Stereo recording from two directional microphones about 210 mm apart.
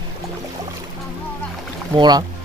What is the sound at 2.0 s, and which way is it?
Speech, 20° right (ahead or behind).